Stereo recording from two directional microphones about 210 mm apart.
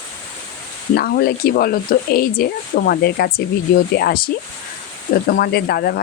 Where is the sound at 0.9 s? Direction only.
45° left (ahead or behind).